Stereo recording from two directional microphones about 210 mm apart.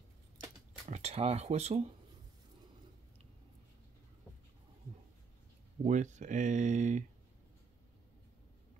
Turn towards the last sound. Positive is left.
turn(degrees=-35)  # may be behind; listen again after turning